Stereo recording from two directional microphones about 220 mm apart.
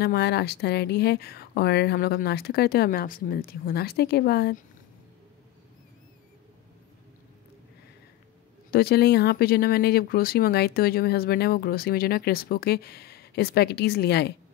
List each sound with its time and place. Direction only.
0.0 s speech: 45° left (ahead or behind)
8.6 s speech: 45° left (ahead or behind)